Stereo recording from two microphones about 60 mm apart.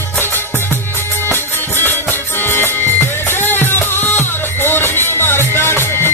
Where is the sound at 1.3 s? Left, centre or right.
Left.